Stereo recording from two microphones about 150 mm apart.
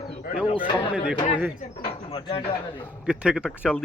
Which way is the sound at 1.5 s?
60° left (ahead or behind).